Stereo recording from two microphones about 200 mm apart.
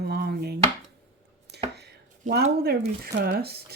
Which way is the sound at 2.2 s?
45° right (ahead or behind).